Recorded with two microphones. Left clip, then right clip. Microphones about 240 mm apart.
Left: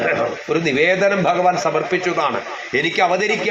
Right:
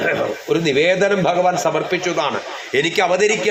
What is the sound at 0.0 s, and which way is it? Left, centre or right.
A man's voice, right.